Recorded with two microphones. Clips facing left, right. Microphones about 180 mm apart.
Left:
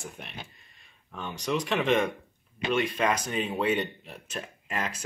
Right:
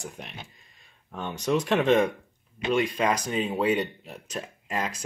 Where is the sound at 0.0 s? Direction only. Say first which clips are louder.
Right 2 dB; 15° right (ahead or behind).